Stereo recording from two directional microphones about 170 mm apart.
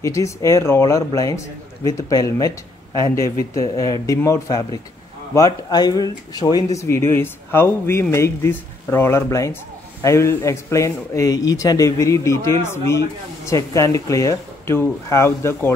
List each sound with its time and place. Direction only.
0.0 s a man's voice: 20° left (ahead or behind)
3.7 s a man's voice: 20° left (ahead or behind)